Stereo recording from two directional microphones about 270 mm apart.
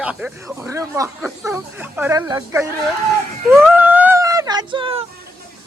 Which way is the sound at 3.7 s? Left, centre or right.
Centre.